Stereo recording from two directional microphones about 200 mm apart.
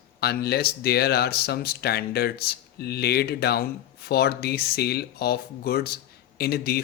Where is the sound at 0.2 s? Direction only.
55° left (ahead or behind).